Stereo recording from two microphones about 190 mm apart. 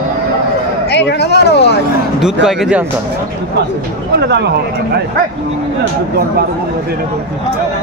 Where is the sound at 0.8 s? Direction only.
60° left (ahead or behind).